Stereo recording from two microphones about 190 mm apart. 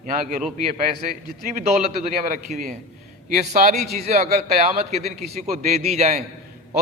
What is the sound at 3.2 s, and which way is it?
A man's voice, 40° right (ahead or behind).